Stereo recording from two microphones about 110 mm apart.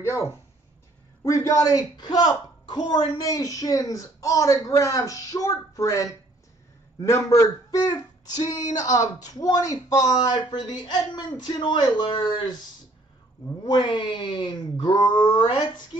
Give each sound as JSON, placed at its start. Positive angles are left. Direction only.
{"t": 0.0, "sound": "speech", "side_deg": 25}
{"t": 13.7, "sound": "speech", "side_deg": 45}